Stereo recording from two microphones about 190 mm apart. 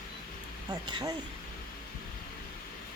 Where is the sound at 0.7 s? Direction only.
20° right (ahead or behind).